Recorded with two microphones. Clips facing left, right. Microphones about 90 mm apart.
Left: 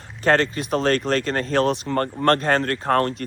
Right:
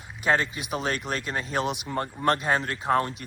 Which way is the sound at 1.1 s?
60° left (ahead or behind).